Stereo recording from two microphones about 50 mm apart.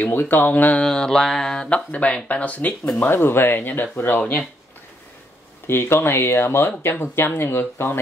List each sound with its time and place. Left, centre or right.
0.0 s speech: left
0.7 s mantra: centre
1.9 s speech: left
3.2 s speech: left
5.7 s speech: left